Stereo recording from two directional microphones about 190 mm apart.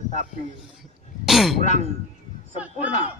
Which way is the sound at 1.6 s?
35° left (ahead or behind).